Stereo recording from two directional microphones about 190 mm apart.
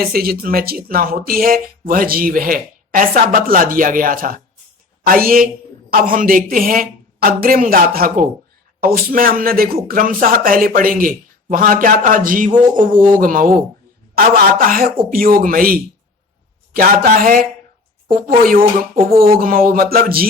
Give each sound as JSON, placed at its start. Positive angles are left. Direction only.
{"t": 0.0, "sound": "speech", "side_deg": -50}